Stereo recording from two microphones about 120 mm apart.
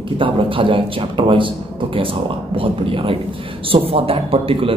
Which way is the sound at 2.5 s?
50° right (ahead or behind).